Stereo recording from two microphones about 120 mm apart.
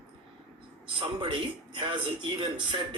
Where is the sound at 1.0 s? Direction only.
45° right (ahead or behind).